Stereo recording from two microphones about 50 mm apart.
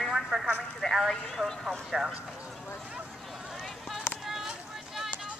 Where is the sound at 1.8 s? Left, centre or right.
Centre.